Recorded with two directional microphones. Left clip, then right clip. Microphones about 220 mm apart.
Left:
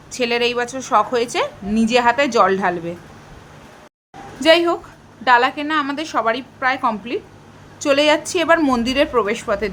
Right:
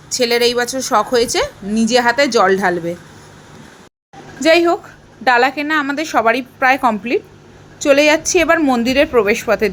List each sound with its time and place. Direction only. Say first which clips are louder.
0.1 s a woman's voice: right 5 dB; 15° right (ahead or behind)
4.4 s a woman's voice: right 2 dB; 10° right (ahead or behind)